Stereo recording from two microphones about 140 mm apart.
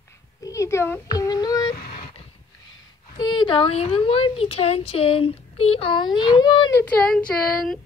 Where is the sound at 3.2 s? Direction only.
35° left (ahead or behind).